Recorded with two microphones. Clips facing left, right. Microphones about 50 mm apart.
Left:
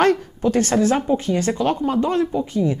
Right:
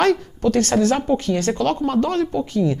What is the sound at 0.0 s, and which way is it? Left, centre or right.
A woman's voice, centre.